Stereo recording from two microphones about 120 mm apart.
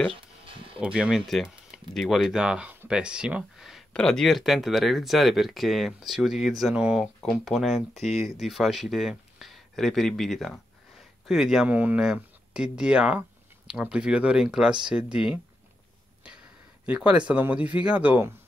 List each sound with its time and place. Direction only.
0.7 s speech: 10° right (ahead or behind)
16.2 s a sound: 10° right (ahead or behind)
16.8 s speech: 10° right (ahead or behind)